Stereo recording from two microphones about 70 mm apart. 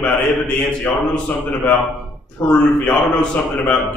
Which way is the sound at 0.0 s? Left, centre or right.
Centre.